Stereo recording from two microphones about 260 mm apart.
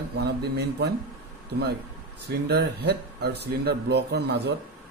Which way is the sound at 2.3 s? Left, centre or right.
Right.